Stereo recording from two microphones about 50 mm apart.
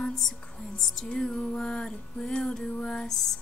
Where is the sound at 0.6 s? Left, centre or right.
Centre.